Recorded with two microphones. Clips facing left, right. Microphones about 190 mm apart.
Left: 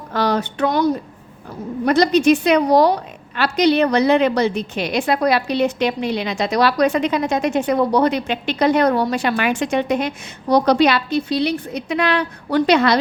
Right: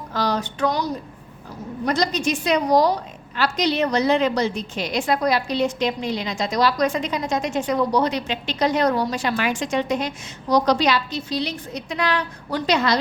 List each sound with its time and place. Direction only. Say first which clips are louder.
0.1 s a woman's voice: left 4 dB; 60° left (ahead or behind)